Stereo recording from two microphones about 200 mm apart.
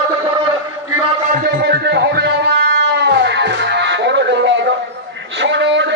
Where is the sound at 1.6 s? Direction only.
55° right (ahead or behind).